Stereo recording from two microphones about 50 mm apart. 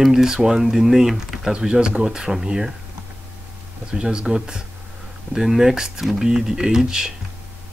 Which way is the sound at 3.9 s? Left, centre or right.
Centre.